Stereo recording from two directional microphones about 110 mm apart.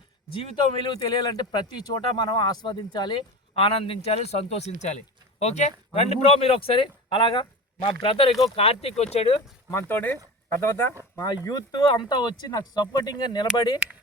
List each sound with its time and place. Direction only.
0.3 s speech: 45° left (ahead or behind)
3.5 s a man's voice: 60° left (ahead or behind)
9.9 s speech: 15° left (ahead or behind)
11.4 s speech: 35° left (ahead or behind)